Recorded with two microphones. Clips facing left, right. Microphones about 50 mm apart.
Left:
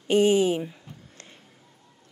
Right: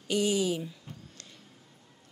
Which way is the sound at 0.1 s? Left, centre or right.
Left.